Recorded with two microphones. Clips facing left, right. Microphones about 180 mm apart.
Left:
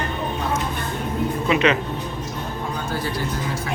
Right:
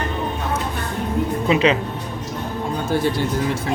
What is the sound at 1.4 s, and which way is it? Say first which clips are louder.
Speech: right 2 dB; 30° right (ahead or behind).